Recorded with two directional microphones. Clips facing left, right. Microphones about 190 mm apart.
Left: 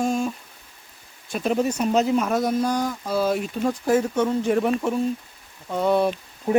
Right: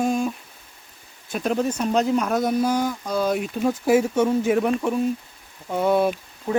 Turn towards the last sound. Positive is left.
turn(degrees=20)  # may be behind; listen again after turning